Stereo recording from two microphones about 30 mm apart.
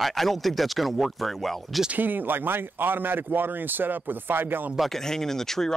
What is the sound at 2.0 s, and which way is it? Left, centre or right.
Speech, right.